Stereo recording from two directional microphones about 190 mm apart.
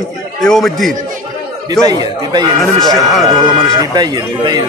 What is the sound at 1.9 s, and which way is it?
Speech, 20° right (ahead or behind).